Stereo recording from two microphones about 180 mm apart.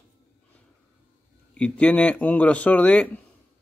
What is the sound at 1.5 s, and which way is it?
Speech, 5° left (ahead or behind).